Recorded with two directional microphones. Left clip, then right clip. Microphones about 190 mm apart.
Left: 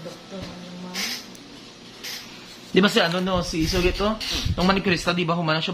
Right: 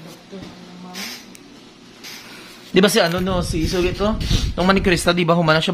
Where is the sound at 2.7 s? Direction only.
50° right (ahead or behind); by 4.5 s 35° right (ahead or behind).